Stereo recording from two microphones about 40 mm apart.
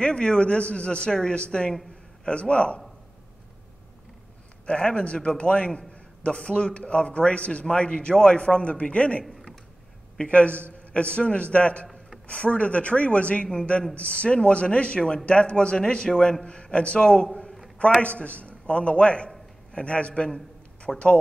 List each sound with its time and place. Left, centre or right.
0.0 s a man's voice: left
4.6 s a man's voice: left
9.2 s a sound: centre
10.1 s a man's voice: left
18.0 s a man's voice: left
20.9 s speech: centre